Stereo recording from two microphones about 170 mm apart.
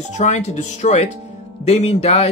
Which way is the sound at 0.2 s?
40° left (ahead or behind).